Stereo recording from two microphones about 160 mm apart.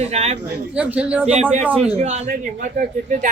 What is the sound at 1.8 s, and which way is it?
Speech, 45° right (ahead or behind).